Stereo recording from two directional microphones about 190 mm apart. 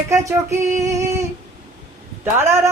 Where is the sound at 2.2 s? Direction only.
15° right (ahead or behind).